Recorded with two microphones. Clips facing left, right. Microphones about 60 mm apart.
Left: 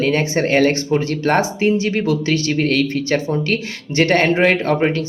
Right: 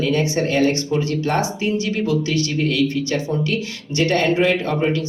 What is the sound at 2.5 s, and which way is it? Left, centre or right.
Speech, left.